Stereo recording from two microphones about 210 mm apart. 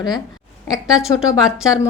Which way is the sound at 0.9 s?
5° right (ahead or behind).